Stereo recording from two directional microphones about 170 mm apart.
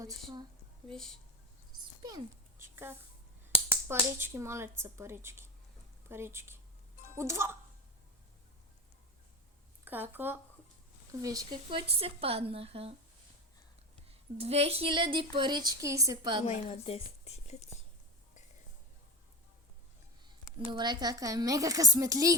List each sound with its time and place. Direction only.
0.9 s speech: 5° left (ahead or behind)
2.0 s a sound: 20° right (ahead or behind)
3.7 s speech: 15° right (ahead or behind)
9.8 s speech: 10° right (ahead or behind); by 13.0 s 35° right (ahead or behind)
14.3 s speech: 35° right (ahead or behind); by 16.4 s 20° right (ahead or behind)
16.5 s a woman's voice: 35° left (ahead or behind)
20.7 s speech: 25° right (ahead or behind)